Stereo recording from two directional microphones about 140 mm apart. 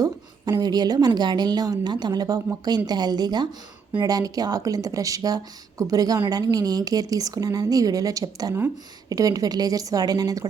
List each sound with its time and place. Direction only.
0.0 s a woman's voice: 25° right (ahead or behind)